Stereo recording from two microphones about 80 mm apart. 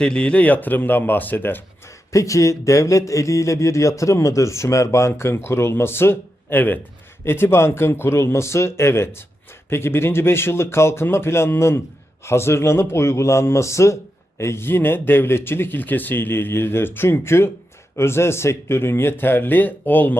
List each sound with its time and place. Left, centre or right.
0.0 s a man's voice: centre
2.1 s a man's voice: left